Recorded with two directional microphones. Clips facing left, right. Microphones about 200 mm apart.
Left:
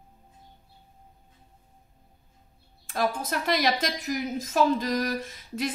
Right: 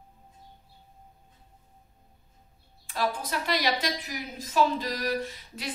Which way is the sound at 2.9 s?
45° left (ahead or behind).